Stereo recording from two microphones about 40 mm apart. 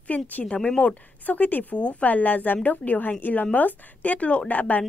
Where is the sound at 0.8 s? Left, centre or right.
Left.